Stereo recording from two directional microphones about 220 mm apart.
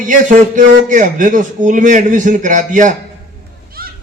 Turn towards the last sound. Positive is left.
turn(degrees=-40)  # may be behind; listen again after turning